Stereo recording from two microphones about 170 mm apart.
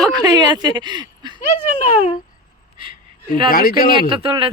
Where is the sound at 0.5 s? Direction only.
25° right (ahead or behind).